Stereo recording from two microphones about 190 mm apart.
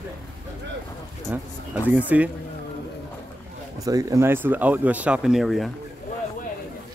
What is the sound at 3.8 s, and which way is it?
Speech, 20° right (ahead or behind).